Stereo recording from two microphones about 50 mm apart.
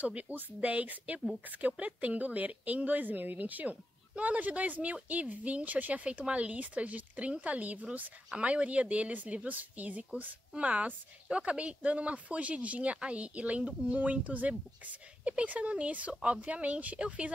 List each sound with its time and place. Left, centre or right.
0.0 s speech: right